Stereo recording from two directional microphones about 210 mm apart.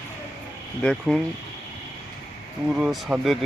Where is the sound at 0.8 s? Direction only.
5° left (ahead or behind).